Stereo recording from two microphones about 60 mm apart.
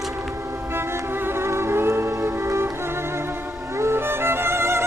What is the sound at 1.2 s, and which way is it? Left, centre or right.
Music, right.